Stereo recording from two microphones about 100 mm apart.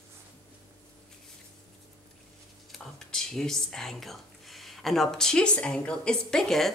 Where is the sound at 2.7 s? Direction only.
5° left (ahead or behind).